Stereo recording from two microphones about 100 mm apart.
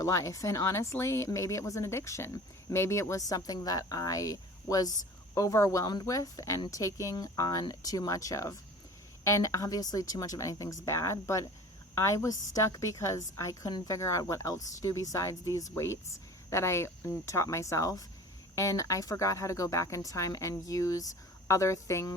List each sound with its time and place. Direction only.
0.0 s speech: 30° left (ahead or behind)